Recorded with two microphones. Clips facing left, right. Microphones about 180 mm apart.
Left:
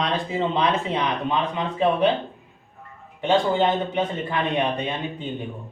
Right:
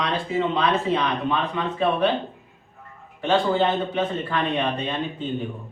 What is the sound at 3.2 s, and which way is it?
A man's voice, 15° left (ahead or behind).